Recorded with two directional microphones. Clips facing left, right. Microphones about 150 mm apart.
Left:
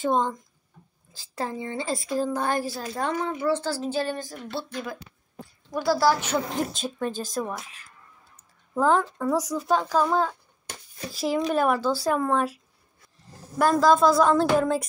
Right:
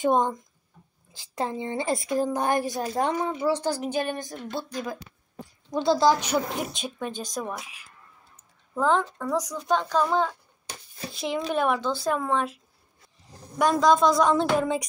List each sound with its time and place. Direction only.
0.0 s a woman's voice: 15° right (ahead or behind)
5.7 s a woman's voice: 20° right (ahead or behind)
6.8 s a woman's voice: centre (ahead or behind)